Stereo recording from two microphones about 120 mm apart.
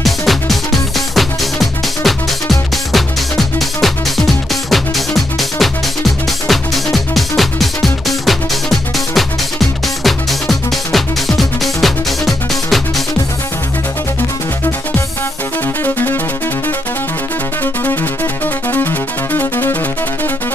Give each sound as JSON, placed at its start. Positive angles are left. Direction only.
{"t": 0.0, "sound": "music", "side_deg": 0}
{"t": 15.8, "sound": "music", "side_deg": 20}
{"t": 18.7, "sound": "music", "side_deg": 15}